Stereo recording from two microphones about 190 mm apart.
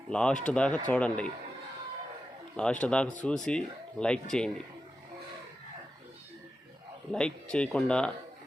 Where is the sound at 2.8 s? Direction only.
5° left (ahead or behind).